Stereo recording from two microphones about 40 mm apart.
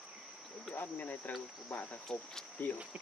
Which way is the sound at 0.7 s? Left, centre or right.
Left.